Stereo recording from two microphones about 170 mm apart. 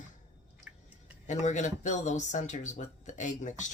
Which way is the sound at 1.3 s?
45° left (ahead or behind).